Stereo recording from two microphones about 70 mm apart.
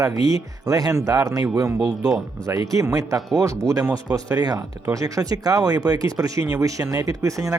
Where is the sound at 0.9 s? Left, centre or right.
Right.